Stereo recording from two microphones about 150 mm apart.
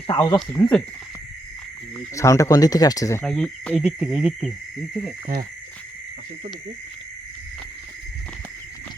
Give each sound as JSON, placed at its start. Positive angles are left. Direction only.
{"t": 0.1, "sound": "speech", "side_deg": 25}
{"t": 0.3, "sound": "speech", "side_deg": 5}
{"t": 2.1, "sound": "speech", "side_deg": 20}
{"t": 3.2, "sound": "speech", "side_deg": 5}
{"t": 3.8, "sound": "music", "side_deg": -5}